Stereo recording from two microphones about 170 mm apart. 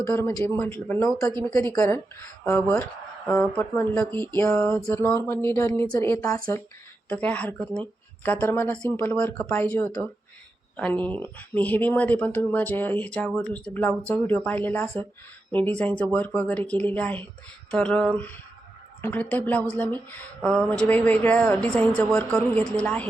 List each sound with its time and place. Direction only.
0.0 s speech: 15° left (ahead or behind)
7.1 s speech: 5° left (ahead or behind)
17.7 s a sound: 5° left (ahead or behind)
19.0 s speech: 10° left (ahead or behind)